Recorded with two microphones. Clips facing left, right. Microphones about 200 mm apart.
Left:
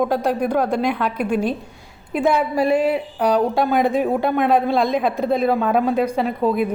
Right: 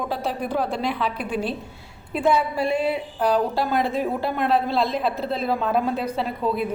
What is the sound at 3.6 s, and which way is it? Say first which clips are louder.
A man's voice: left 5 dB; 50° left (ahead or behind).